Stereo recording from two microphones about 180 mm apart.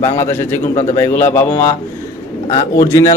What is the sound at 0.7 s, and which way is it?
Speech, 40° left (ahead or behind).